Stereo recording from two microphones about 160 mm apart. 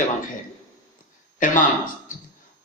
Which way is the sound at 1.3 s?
55° left (ahead or behind).